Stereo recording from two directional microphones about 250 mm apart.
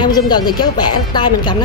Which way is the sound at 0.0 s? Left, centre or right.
Centre.